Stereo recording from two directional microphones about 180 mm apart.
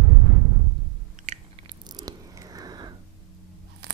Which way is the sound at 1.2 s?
45° right (ahead or behind).